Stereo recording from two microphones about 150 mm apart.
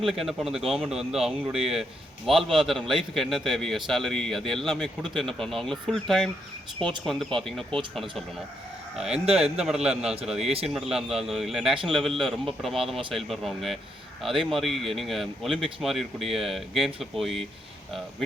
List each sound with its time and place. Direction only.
0.0 s speech: centre (ahead or behind)
9.0 s speech: 5° right (ahead or behind)